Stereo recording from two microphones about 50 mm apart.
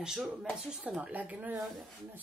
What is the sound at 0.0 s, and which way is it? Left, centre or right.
Speech, centre.